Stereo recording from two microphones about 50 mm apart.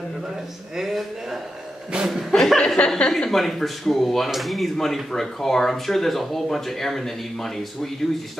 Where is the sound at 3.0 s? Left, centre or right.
Centre.